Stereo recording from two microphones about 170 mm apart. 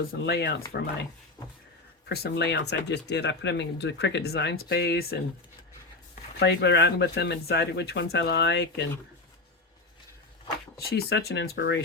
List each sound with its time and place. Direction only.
0.3 s speech: 70° left (ahead or behind)
2.0 s speech: 70° left (ahead or behind)
6.4 s speech: 85° left
10.8 s speech: 65° left (ahead or behind); by 11.8 s 90° left